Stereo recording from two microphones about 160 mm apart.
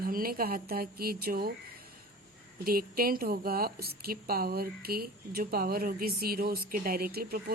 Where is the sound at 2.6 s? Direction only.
65° right (ahead or behind).